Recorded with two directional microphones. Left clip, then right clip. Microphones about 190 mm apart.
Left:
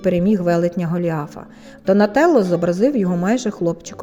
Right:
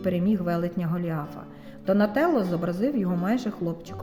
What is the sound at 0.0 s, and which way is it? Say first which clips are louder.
Speech: left 9 dB; 45° left (ahead or behind).